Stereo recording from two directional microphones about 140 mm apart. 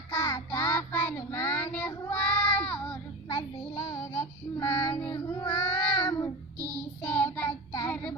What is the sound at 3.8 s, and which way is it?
Child singing, 20° left (ahead or behind).